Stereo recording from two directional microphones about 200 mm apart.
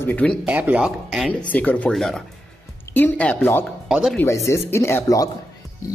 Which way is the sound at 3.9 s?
Centre (ahead or behind).